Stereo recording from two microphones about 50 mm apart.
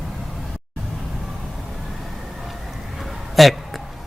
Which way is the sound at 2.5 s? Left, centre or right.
Centre.